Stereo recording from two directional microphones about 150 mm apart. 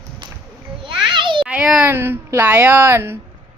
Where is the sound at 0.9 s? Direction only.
35° right (ahead or behind).